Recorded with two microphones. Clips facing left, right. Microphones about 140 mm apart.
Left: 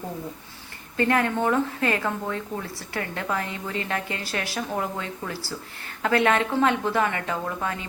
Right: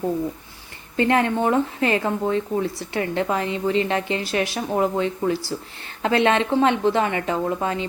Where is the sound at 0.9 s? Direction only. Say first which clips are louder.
Right 3 dB; 20° right (ahead or behind).